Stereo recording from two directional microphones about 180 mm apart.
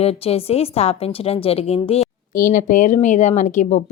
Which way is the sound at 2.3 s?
50° left (ahead or behind).